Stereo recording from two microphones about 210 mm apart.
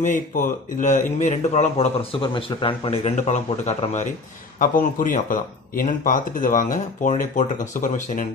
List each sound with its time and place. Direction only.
0.0 s speech: 35° left (ahead or behind)